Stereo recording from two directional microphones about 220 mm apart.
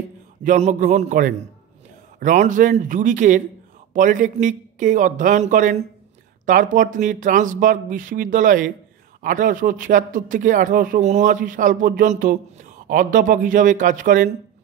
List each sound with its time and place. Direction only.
0.4 s speech: 35° right (ahead or behind)